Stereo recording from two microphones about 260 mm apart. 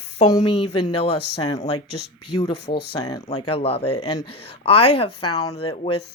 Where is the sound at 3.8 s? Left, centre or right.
Left.